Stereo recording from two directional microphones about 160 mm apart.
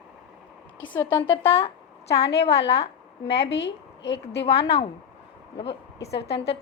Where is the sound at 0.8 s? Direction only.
10° left (ahead or behind).